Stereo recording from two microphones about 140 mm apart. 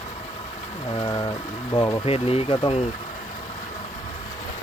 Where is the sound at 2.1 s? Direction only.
45° left (ahead or behind).